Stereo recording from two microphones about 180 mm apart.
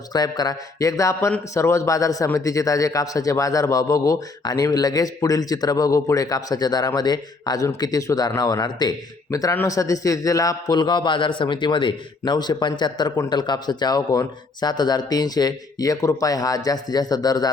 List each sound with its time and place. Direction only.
0.1 s speech: 20° left (ahead or behind)